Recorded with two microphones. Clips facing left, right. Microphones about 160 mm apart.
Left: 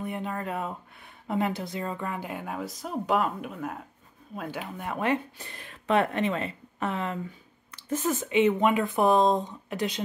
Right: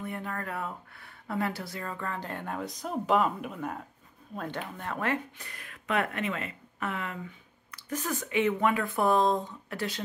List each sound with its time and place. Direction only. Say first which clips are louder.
0.0 s speech: left 4 dB; 20° left (ahead or behind)